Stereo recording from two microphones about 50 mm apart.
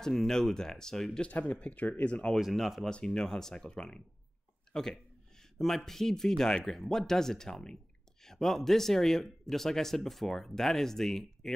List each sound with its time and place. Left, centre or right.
0.0 s speech: centre
1.5 s speech: left
2.3 s speech: centre
2.9 s speech: centre
4.7 s a sound: centre
5.9 s speech: centre